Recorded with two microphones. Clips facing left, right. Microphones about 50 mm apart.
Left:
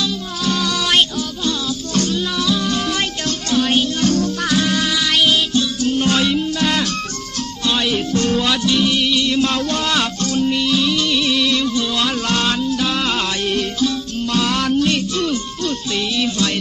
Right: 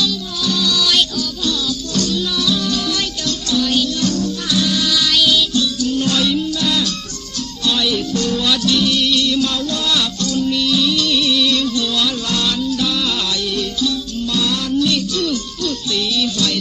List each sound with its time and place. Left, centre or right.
0.4 s music: left
6.6 s music: left
7.7 s music: left
9.6 s music: left
12.0 s music: left
14.3 s music: left